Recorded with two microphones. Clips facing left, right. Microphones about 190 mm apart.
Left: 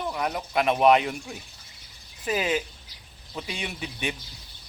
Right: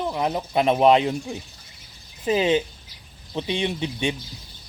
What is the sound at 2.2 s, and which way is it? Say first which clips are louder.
Speech: right 6 dB; 25° right (ahead or behind).